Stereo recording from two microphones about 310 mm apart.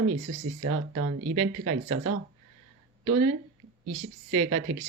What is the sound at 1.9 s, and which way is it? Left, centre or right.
Speech, right.